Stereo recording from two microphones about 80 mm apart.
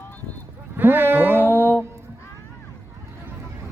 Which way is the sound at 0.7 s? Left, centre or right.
Right.